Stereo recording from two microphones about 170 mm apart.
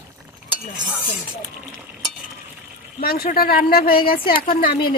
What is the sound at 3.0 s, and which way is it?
A woman's voice, 60° left (ahead or behind).